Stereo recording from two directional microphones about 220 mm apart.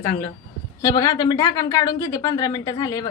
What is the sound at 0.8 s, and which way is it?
A woman's voice, 15° left (ahead or behind).